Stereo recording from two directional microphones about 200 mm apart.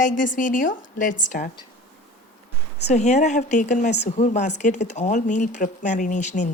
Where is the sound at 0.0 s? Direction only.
40° left (ahead or behind).